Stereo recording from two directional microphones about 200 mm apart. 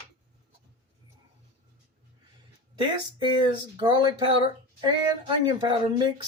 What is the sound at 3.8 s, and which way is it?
Speech, 20° right (ahead or behind).